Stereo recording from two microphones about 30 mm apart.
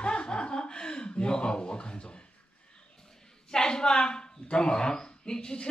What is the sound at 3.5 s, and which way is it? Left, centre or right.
A woman's voice, left.